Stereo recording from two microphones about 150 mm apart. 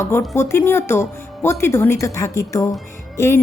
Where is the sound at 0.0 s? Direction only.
15° left (ahead or behind).